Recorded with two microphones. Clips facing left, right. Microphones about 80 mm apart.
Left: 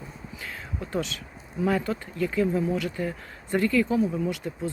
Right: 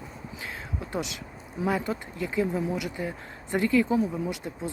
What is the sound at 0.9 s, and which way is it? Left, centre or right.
Speech, centre.